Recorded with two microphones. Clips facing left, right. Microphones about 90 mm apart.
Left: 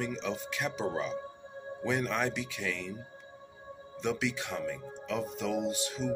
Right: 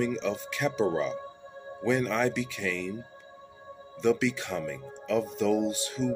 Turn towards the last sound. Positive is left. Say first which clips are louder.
# right 3 dB
turn(degrees=15)  # may be behind; listen again after turning